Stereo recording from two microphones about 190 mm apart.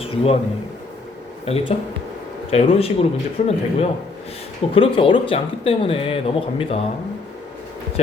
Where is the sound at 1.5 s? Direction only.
30° left (ahead or behind).